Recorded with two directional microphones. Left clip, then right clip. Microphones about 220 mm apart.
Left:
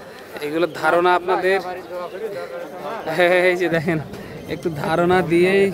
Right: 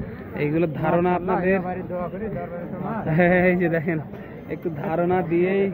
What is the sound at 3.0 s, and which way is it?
Speech, 15° left (ahead or behind).